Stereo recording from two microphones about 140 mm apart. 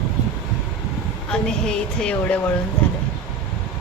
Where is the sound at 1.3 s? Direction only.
5° left (ahead or behind).